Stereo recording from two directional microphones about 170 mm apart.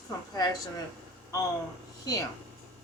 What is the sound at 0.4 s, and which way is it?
Speech, 25° left (ahead or behind).